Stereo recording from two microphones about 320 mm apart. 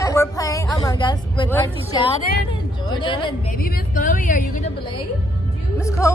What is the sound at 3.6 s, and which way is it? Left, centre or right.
Speech, left.